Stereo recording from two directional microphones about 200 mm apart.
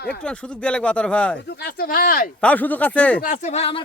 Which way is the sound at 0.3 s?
5° left (ahead or behind).